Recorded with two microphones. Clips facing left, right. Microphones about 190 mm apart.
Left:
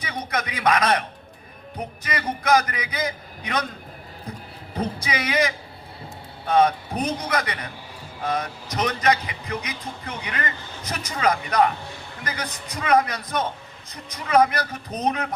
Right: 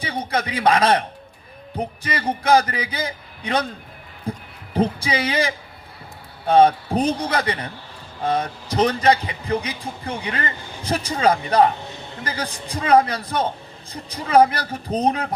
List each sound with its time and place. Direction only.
0.0 s a man's voice: 30° right (ahead or behind)